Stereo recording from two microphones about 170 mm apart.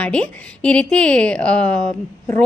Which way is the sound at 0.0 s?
5° left (ahead or behind).